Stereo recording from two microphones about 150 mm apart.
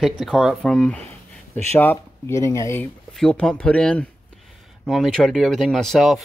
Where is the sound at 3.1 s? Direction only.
5° left (ahead or behind).